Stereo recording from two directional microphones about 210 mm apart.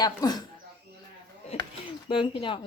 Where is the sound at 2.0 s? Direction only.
25° left (ahead or behind).